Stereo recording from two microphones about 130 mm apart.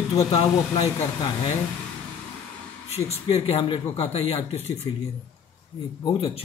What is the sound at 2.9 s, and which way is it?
Speech, 55° left (ahead or behind).